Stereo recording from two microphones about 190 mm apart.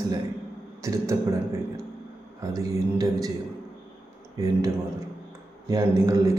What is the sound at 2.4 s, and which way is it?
Speech, 20° right (ahead or behind).